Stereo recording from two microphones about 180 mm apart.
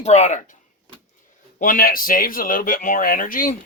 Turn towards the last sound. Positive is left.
turn(degrees=50)  # may be behind; listen again after turning